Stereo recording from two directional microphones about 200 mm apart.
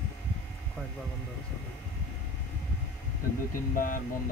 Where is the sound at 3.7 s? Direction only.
45° left (ahead or behind).